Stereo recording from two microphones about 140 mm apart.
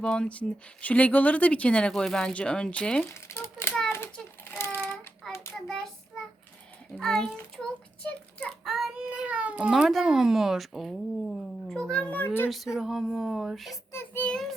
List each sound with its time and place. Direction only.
0.0 s speech: 5° left (ahead or behind)
3.2 s crumpling: 20° left (ahead or behind)
3.8 s child singing: 15° left (ahead or behind)
5.5 s a child's voice: centre (ahead or behind)
6.9 s a child's voice: 5° left (ahead or behind)
12.5 s a child's voice: centre (ahead or behind)
13.9 s child singing: 15° left (ahead or behind)